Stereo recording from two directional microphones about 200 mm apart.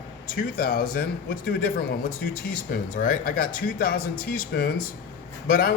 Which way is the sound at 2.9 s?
45° left (ahead or behind).